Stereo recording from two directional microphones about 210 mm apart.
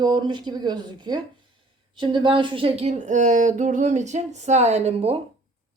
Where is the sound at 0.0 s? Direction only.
20° right (ahead or behind).